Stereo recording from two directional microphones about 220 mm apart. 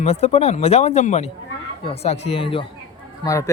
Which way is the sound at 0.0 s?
30° left (ahead or behind).